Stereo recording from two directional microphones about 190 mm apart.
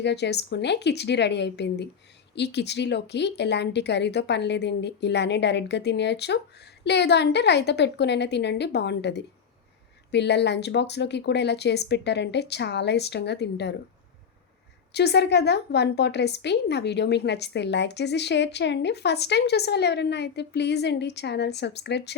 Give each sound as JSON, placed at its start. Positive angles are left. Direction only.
{"t": 0.0, "sound": "a woman's voice", "side_deg": 60}
{"t": 14.9, "sound": "a woman's voice", "side_deg": 60}